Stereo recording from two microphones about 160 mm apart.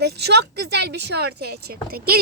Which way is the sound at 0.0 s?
90° right.